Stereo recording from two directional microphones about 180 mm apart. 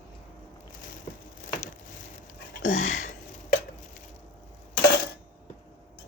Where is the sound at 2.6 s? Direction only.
45° left (ahead or behind).